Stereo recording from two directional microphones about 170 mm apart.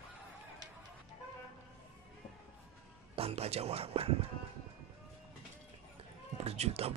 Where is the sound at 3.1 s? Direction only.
35° right (ahead or behind).